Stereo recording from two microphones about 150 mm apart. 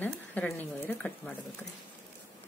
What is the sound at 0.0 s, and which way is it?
Speech, 10° left (ahead or behind).